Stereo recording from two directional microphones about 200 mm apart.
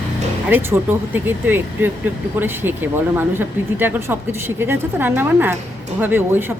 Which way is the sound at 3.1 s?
10° right (ahead or behind).